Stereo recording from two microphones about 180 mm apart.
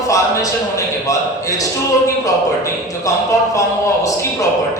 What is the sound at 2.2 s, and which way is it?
A man's voice, 20° left (ahead or behind).